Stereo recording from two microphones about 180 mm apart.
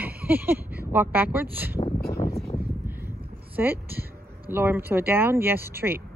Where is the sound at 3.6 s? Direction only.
10° right (ahead or behind).